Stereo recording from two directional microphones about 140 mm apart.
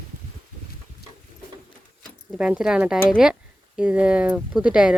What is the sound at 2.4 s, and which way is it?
Speech, 5° right (ahead or behind).